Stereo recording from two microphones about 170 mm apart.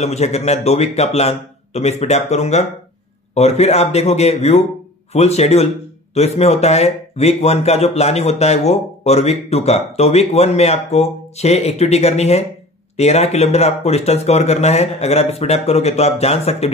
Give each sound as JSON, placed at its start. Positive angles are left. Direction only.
{"t": 0.0, "sound": "speech", "side_deg": 40}